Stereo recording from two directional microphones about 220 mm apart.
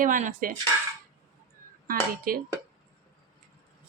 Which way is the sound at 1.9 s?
40° right (ahead or behind).